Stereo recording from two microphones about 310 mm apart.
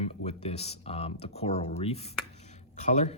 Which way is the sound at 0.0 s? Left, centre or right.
Centre.